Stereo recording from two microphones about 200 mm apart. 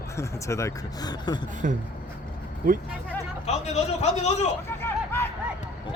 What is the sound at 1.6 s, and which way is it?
Speech, 40° right (ahead or behind).